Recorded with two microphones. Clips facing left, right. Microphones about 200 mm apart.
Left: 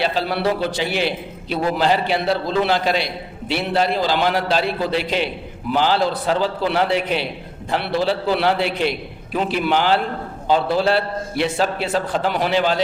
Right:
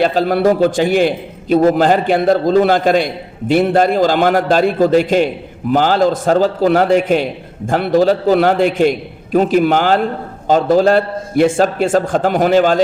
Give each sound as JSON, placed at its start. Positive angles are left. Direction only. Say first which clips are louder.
{"t": 0.0, "sound": "a man's voice", "louder": "right 8 dB", "side_deg": -45}